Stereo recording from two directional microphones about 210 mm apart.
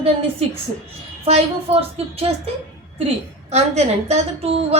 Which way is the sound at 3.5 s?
30° right (ahead or behind).